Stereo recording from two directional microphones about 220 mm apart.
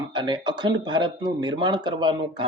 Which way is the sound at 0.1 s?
20° right (ahead or behind).